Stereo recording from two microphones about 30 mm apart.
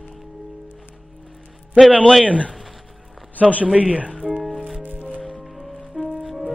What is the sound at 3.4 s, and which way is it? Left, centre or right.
Speech, left.